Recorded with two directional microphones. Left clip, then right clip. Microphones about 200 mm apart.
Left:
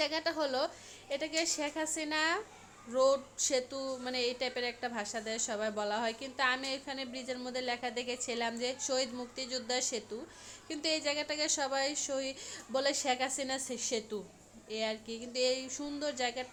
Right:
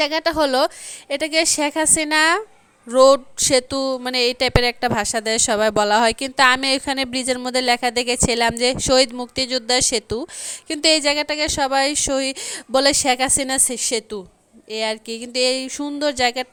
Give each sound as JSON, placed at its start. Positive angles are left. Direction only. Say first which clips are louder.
{"t": 0.0, "sound": "speech", "louder": "right 14 dB", "side_deg": -50}